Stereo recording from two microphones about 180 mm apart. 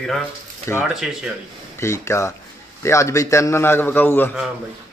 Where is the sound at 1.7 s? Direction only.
15° left (ahead or behind).